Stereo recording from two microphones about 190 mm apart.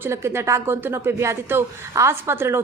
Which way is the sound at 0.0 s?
15° right (ahead or behind).